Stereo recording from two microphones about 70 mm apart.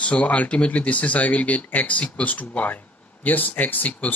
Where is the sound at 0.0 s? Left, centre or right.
Centre.